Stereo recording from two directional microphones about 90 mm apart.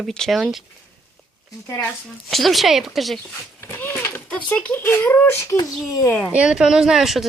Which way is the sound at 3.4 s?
25° left (ahead or behind).